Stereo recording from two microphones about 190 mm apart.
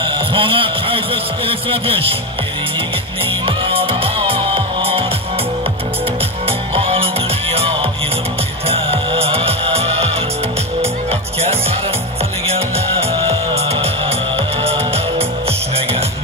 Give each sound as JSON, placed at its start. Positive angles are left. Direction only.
{"t": 0.0, "sound": "speech", "side_deg": -25}
{"t": 3.4, "sound": "music", "side_deg": -30}
{"t": 6.7, "sound": "music", "side_deg": -30}
{"t": 12.5, "sound": "music", "side_deg": -30}